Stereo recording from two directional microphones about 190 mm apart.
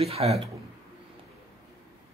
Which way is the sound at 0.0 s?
30° right (ahead or behind).